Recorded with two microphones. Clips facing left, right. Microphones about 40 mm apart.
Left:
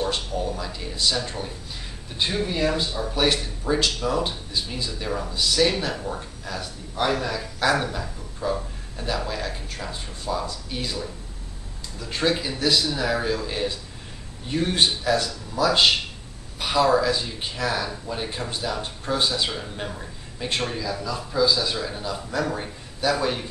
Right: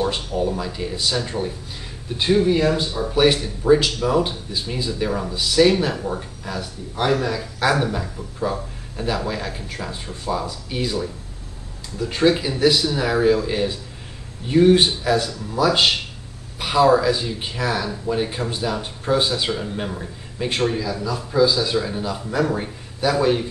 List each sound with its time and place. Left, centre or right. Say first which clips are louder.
0.0 s speech: right 4 dB; centre